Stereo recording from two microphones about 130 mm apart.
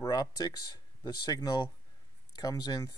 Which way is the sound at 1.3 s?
30° left (ahead or behind).